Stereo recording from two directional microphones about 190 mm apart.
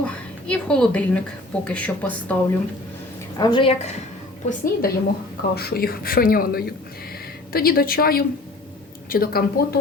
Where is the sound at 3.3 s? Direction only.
20° left (ahead or behind).